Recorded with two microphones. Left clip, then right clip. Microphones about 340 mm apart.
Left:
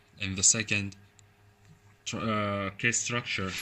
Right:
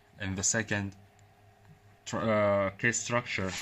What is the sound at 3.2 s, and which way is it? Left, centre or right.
Speech, right.